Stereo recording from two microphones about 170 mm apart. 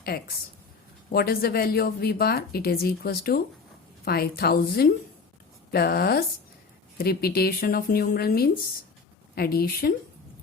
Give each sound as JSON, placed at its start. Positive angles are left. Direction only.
{"t": 1.1, "sound": "speech", "side_deg": 65}